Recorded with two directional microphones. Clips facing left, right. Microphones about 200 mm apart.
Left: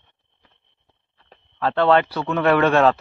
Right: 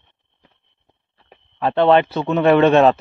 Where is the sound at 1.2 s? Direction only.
20° right (ahead or behind).